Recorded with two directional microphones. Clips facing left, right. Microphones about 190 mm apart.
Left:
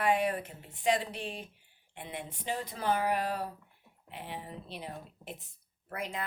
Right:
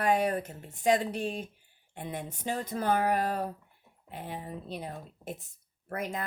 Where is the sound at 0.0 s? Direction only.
40° right (ahead or behind).